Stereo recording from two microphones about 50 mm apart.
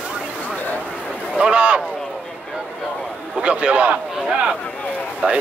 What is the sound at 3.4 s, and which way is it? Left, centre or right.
Speech, right.